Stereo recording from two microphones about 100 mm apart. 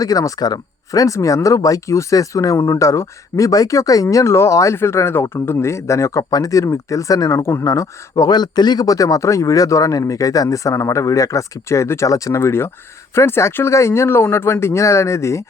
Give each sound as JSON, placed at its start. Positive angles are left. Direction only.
{"t": 0.0, "sound": "speech", "side_deg": 35}